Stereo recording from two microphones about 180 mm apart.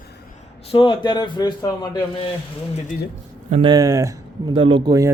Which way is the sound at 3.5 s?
35° right (ahead or behind).